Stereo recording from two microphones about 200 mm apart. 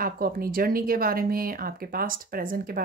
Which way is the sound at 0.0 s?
45° right (ahead or behind).